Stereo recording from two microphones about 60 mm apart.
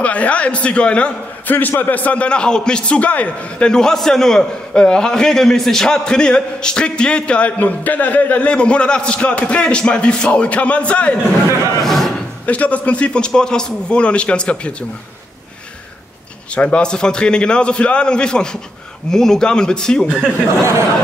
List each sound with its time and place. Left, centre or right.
0.0 s a man's voice: left
1.5 s a man's voice: left
11.8 s a sound: centre
12.4 s a man's voice: left
16.5 s a man's voice: centre